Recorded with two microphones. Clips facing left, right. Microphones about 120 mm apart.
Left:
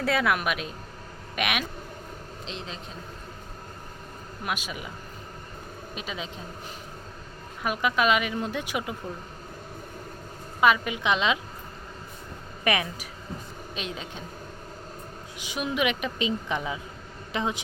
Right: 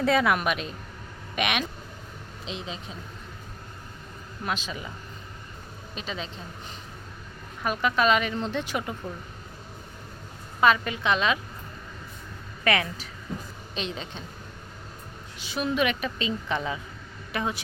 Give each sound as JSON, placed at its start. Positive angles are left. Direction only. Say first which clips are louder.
{"t": 0.0, "sound": "a woman's voice", "louder": "right 2 dB", "side_deg": 0}
{"t": 4.4, "sound": "a woman's voice", "louder": "right 1 dB", "side_deg": 10}
{"t": 5.9, "sound": "a woman's voice", "louder": "right 1 dB", "side_deg": 10}
{"t": 7.6, "sound": "a woman's voice", "louder": "right 1 dB", "side_deg": 10}
{"t": 10.6, "sound": "a woman's voice", "louder": "even", "side_deg": 10}
{"t": 12.6, "sound": "a woman's voice", "louder": "right 1 dB", "side_deg": 15}
{"t": 15.4, "sound": "a woman's voice", "louder": "right 2 dB", "side_deg": 15}